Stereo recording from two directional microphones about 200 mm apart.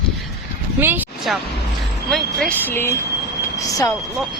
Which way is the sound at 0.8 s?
10° right (ahead or behind).